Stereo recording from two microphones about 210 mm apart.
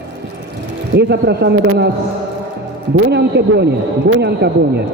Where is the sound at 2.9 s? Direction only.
55° right (ahead or behind).